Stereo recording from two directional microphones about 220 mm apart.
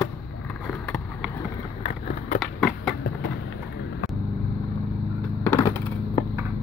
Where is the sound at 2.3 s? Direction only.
Centre (ahead or behind).